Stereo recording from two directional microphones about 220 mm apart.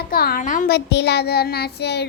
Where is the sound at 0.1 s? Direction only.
45° left (ahead or behind).